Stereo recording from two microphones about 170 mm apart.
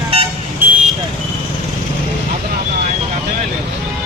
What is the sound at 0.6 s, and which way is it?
Vehicle, 15° right (ahead or behind).